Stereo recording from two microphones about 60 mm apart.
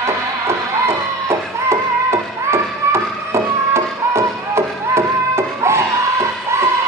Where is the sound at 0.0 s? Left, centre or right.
Right.